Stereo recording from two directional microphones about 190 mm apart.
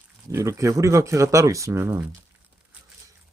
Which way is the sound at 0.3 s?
15° right (ahead or behind).